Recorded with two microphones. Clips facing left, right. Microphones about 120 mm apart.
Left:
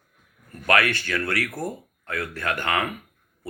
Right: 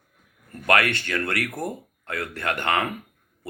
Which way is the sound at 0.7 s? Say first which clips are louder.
Even; 25° right (ahead or behind).